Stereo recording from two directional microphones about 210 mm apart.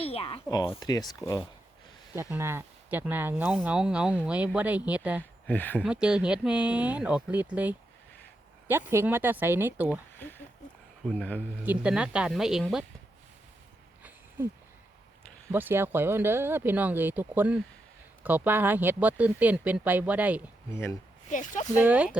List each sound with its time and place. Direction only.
0.0 s a sound: 25° left (ahead or behind)
0.8 s speech: 20° left (ahead or behind)
2.3 s speech: 10° right (ahead or behind)
5.5 s speech: 10° left (ahead or behind)
5.8 s speech: 5° right (ahead or behind)
8.9 s speech: 10° right (ahead or behind)
10.2 s a sound: 10° left (ahead or behind)
11.0 s speech: 5° left (ahead or behind)
11.6 s speech: 5° right (ahead or behind)
15.5 s speech: 10° right (ahead or behind)
20.7 s speech: 10° left (ahead or behind)
21.2 s speech: 35° left (ahead or behind)
21.8 s speech: 5° right (ahead or behind)